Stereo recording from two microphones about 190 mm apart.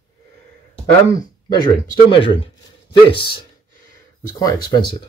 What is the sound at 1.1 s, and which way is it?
Speech, 25° left (ahead or behind).